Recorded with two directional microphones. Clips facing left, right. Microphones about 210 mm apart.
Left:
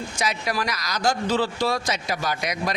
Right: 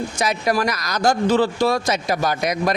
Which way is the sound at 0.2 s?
50° right (ahead or behind).